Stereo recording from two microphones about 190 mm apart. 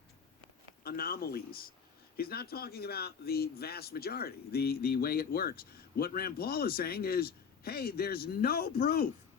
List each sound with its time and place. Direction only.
0.9 s speech: 50° left (ahead or behind)